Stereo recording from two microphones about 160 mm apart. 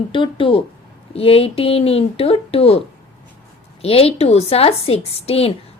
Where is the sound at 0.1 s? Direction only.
30° left (ahead or behind).